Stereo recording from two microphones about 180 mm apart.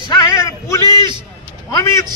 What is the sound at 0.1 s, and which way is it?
Music, 20° left (ahead or behind).